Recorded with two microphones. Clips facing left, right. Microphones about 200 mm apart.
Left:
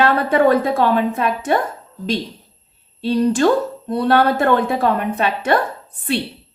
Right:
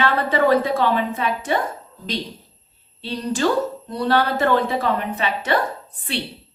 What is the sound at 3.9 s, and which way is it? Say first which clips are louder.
A woman's voice: left 5 dB; 55° left (ahead or behind).